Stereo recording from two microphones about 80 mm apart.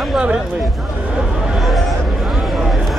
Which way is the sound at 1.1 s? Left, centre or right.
Centre.